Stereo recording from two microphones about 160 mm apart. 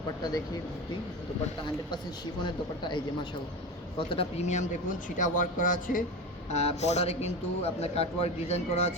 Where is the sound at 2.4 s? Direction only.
30° left (ahead or behind); by 6.0 s 60° left (ahead or behind).